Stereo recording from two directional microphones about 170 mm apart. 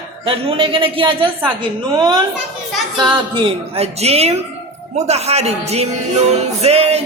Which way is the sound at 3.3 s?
35° right (ahead or behind).